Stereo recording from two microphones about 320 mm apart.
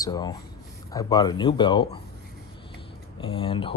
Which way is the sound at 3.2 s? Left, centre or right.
Centre.